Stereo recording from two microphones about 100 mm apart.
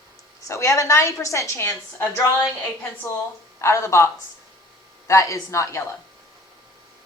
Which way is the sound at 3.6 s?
30° left (ahead or behind).